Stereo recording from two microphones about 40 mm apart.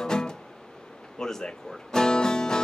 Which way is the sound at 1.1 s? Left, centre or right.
Centre.